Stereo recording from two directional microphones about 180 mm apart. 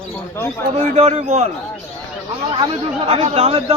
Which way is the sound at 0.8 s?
40° right (ahead or behind).